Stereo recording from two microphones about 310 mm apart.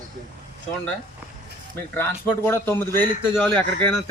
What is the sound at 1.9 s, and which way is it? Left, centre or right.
Speech, centre.